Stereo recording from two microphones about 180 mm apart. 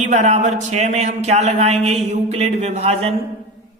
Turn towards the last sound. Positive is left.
turn(degrees=-35)  # may be behind; listen again after turning